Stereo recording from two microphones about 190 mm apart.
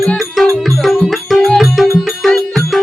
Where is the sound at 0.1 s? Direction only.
Centre (ahead or behind).